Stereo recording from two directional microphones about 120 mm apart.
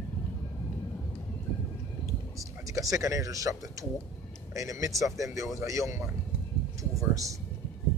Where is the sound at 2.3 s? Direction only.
30° right (ahead or behind).